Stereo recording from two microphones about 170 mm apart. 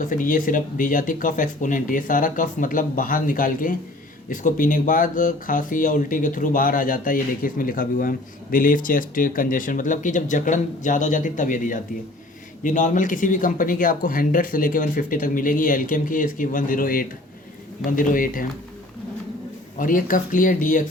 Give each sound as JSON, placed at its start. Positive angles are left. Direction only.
{"t": 0.0, "sound": "speech", "side_deg": 50}
{"t": 19.8, "sound": "speech", "side_deg": 55}